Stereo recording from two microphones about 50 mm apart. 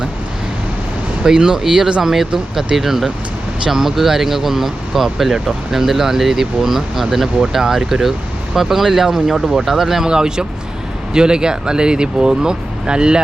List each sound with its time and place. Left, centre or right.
1.2 s speech: centre